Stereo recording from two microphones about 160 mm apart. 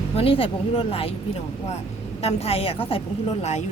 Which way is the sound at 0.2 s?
35° left (ahead or behind).